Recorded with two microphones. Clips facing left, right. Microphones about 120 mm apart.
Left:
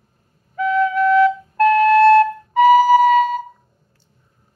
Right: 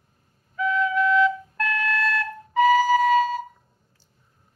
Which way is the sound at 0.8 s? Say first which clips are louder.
Left 6 dB; 40° left (ahead or behind).